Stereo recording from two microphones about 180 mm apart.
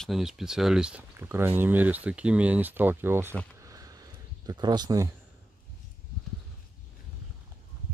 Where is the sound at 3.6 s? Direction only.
20° right (ahead or behind).